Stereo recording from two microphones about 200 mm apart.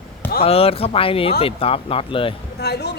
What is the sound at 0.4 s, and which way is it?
Speech, 30° left (ahead or behind).